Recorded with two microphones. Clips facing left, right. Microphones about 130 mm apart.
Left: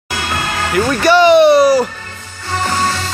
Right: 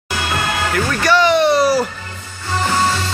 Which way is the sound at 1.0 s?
15° left (ahead or behind).